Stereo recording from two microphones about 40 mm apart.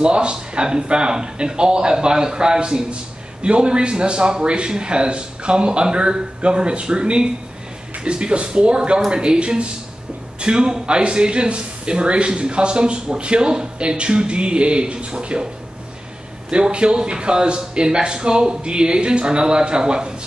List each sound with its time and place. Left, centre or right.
0.0 s speech: right
16.4 s speech: right